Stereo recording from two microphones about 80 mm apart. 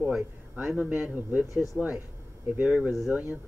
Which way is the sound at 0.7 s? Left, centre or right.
Centre.